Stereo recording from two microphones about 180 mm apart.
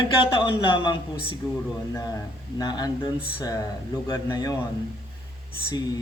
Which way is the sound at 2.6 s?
20° left (ahead or behind).